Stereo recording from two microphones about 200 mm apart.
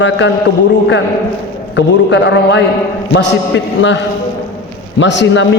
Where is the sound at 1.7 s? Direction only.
60° left (ahead or behind).